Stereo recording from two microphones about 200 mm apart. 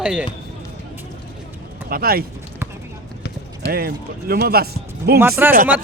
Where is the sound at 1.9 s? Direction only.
50° right (ahead or behind).